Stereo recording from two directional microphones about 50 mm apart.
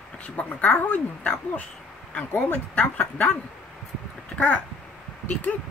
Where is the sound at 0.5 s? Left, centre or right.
Left.